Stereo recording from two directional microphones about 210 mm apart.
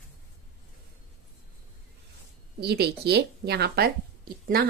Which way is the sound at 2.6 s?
50° right (ahead or behind).